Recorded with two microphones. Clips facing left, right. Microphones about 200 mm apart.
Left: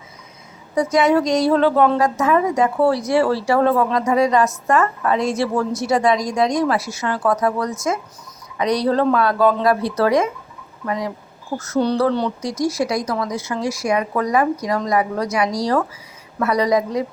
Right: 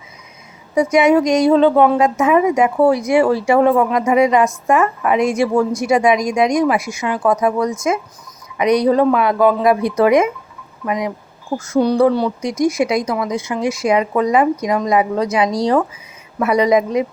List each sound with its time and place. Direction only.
0.8 s a woman's voice: 15° right (ahead or behind)